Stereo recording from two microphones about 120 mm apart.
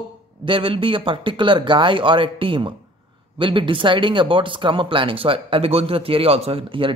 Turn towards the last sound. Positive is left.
turn(degrees=-45)  # may be behind; listen again after turning